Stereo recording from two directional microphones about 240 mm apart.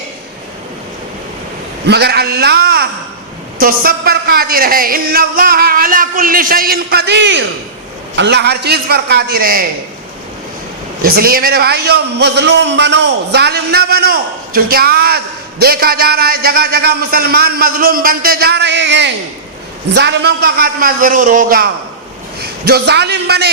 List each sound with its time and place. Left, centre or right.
1.9 s a man's voice: right
11.0 s a man's voice: right